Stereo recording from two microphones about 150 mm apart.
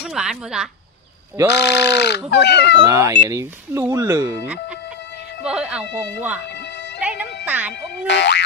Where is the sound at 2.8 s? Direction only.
20° right (ahead or behind).